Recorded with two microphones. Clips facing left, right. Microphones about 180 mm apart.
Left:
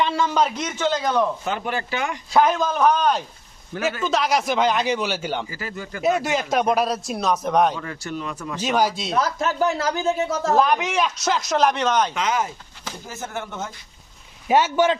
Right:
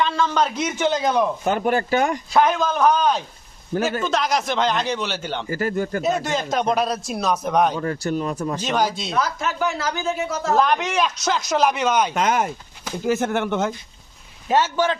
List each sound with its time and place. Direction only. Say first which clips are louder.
0.0 s a man's voice: even; 10° left (ahead or behind)
0.8 s a man's voice: right 1 dB; 15° right (ahead or behind)
1.5 s speech: right 6 dB; 45° right (ahead or behind)
2.3 s speech: left 2 dB; 5° left (ahead or behind)
5.5 s speech: right 10 dB; 50° right (ahead or behind)
6.2 s speech: left 1 dB; 5° left (ahead or behind)
7.8 s speech: right 7 dB; 40° right (ahead or behind)
8.6 s speech: left 3 dB; 5° left (ahead or behind)
9.0 s speech: left 1 dB; 30° left (ahead or behind)
10.5 s speech: right 1 dB; 5° left (ahead or behind)
12.1 s speech: right 3 dB; 50° right (ahead or behind)
13.1 s speech: right 12 dB; 70° right (ahead or behind)
14.4 s speech: left 2 dB; 15° left (ahead or behind)